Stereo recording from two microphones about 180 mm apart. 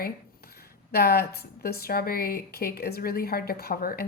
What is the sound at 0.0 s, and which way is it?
Speech, 60° left (ahead or behind).